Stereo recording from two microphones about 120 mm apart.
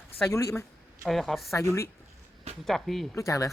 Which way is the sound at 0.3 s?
25° left (ahead or behind).